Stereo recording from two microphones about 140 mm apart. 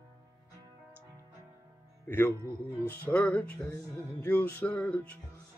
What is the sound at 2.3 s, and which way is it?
Speech, 20° right (ahead or behind).